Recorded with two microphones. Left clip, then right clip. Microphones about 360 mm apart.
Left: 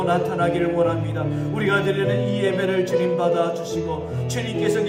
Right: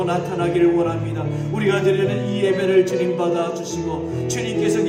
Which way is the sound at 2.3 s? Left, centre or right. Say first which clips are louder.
Right 4 dB; left.